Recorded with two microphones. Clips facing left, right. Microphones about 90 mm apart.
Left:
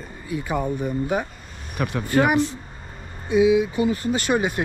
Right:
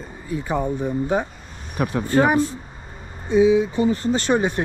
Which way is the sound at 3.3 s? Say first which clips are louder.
Right 1 dB; 35° right (ahead or behind).